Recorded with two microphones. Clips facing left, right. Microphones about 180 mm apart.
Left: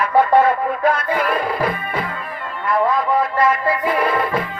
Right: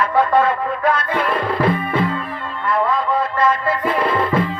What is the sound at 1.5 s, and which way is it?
Music, 25° right (ahead or behind).